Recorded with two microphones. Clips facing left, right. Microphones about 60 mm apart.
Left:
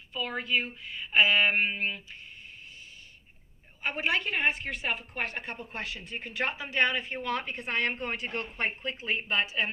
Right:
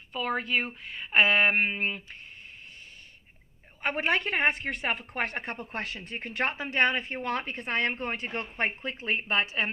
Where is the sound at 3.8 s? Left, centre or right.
Right.